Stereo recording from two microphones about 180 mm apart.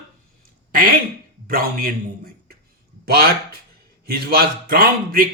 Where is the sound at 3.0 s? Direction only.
60° right (ahead or behind).